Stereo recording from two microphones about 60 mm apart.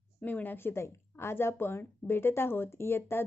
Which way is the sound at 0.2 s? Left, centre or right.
Left.